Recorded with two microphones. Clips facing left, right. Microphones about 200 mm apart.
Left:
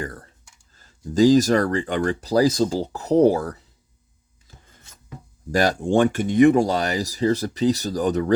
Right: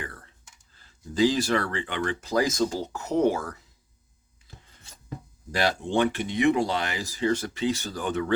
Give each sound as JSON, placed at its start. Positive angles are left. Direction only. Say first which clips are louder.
{"t": 0.0, "sound": "computer keyboard", "louder": "left 7 dB", "side_deg": 40}
{"t": 0.7, "sound": "speech", "louder": "left 8 dB", "side_deg": 45}
{"t": 5.5, "sound": "speech", "louder": "left 6 dB", "side_deg": 45}